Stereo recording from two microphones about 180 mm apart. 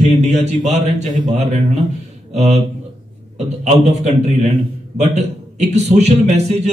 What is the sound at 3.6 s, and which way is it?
A man's voice, 40° right (ahead or behind).